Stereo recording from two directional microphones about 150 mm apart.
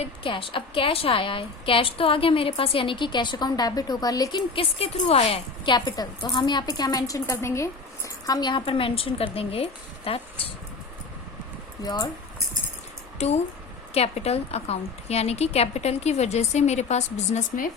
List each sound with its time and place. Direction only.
0.0 s a woman's voice: 35° left (ahead or behind)
11.8 s speech: 25° left (ahead or behind)
13.1 s a woman's voice: 45° left (ahead or behind)